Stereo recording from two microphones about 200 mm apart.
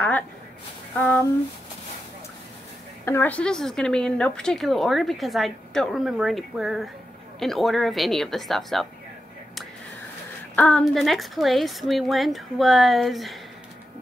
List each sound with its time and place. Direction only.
3.1 s a woman's voice: 10° left (ahead or behind)
10.5 s a woman's voice: 5° left (ahead or behind)